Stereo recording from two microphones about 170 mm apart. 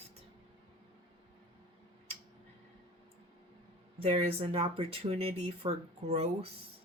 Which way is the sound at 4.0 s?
35° right (ahead or behind).